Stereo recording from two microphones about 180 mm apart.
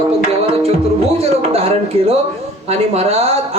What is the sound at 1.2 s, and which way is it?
Speech, 35° right (ahead or behind).